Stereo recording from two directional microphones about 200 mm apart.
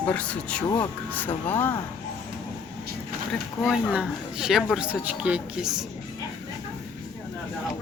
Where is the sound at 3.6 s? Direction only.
Centre (ahead or behind).